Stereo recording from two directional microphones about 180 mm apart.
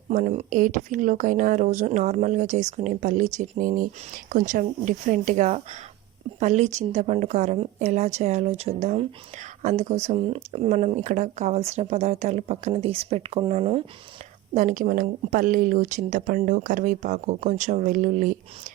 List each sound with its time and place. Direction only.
0.1 s speech: 45° right (ahead or behind)
14.5 s speech: 45° right (ahead or behind)